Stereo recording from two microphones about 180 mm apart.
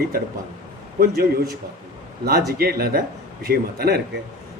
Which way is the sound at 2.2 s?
60° right (ahead or behind).